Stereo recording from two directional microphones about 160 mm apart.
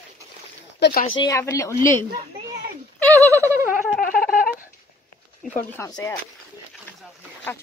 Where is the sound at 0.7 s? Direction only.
80° left.